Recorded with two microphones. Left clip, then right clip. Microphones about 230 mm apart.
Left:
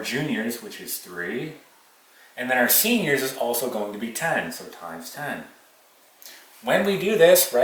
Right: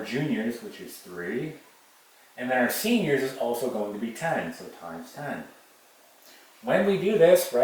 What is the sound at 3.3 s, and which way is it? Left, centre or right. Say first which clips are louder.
Speech: left 2 dB; right.